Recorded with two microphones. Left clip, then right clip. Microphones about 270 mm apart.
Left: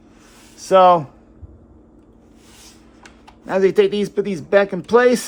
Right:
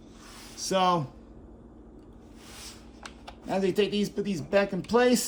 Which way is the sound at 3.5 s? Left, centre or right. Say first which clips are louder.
Left 11 dB; left.